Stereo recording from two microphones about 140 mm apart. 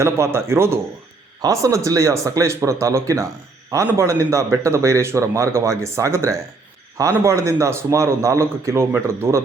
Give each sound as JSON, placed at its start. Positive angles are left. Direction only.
{"t": 0.0, "sound": "a man's voice", "side_deg": -20}